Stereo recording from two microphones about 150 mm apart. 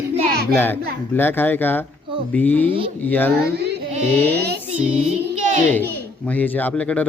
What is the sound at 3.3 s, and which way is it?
Speech, 90° right.